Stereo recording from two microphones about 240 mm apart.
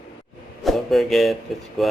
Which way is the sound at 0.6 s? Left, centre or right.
Centre.